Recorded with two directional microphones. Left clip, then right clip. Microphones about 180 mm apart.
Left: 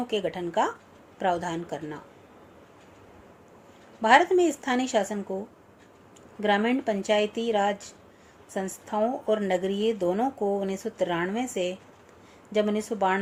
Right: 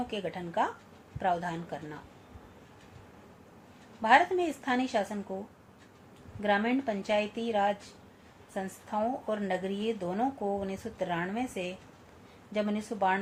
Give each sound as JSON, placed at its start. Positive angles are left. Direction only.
{"t": 0.1, "sound": "a woman's voice", "side_deg": 50}
{"t": 4.0, "sound": "a woman's voice", "side_deg": 50}
{"t": 6.4, "sound": "a woman's voice", "side_deg": 50}